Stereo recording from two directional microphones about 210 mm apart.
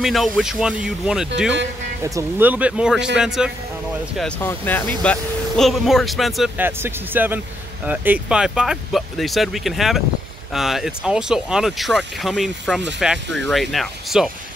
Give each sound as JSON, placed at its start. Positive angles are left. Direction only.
{"t": 0.0, "sound": "speech", "side_deg": 0}
{"t": 4.2, "sound": "speech", "side_deg": 10}